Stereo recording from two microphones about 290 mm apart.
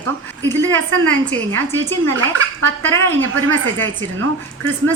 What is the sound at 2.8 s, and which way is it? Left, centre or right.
Speech, centre.